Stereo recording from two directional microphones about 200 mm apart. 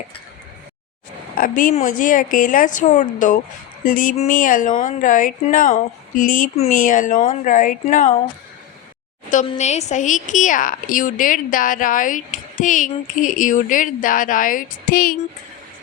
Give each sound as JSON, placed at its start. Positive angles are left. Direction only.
{"t": 1.4, "sound": "a woman's voice", "side_deg": 45}
{"t": 9.5, "sound": "a woman's voice", "side_deg": 35}